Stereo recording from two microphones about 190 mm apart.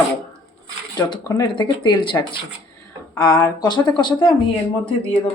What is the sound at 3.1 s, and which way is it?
Speech, 20° left (ahead or behind).